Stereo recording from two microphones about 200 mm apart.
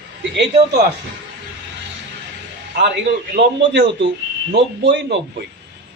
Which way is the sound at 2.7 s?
60° right (ahead or behind).